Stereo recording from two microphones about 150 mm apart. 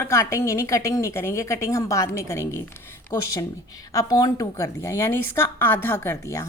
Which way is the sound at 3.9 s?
25° left (ahead or behind).